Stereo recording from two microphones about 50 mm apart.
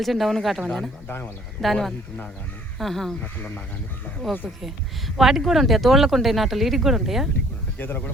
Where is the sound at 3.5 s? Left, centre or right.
Left.